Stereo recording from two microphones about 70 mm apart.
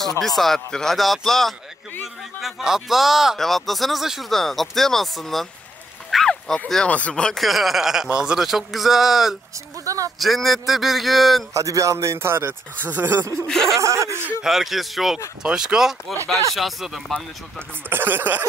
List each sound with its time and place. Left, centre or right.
0.2 s speech: centre
6.0 s a sound: centre
6.9 s speech: centre
7.3 s speech: centre
9.8 s a sound: right
10.1 s speech: centre
11.5 s speech: right
13.5 s speech: centre
13.7 s speech: right
14.4 s speech: centre
17.8 s speech: right